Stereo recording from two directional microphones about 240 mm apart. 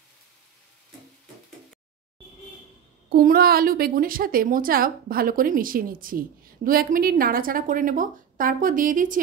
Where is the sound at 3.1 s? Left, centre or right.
Right.